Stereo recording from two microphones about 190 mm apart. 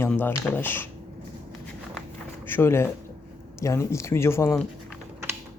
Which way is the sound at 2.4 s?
10° left (ahead or behind).